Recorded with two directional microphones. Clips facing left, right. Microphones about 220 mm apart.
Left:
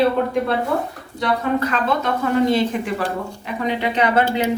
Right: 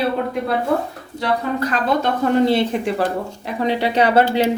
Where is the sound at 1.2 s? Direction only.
35° right (ahead or behind).